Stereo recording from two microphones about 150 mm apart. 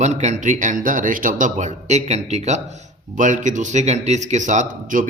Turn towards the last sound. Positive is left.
turn(degrees=-60)  # may be behind; listen again after turning